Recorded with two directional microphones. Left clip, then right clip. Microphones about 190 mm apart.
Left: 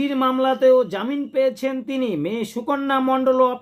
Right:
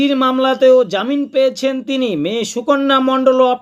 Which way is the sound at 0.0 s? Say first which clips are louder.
Right 6 dB; 20° right (ahead or behind).